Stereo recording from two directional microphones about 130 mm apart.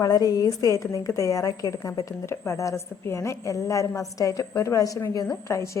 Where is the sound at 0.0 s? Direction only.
30° left (ahead or behind).